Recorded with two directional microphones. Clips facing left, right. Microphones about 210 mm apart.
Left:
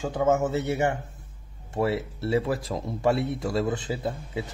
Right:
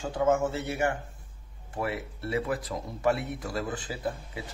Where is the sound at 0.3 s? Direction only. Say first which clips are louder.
Left 3 dB; 20° left (ahead or behind).